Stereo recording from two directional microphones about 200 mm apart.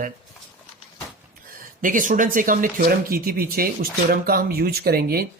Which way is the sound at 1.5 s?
45° right (ahead or behind).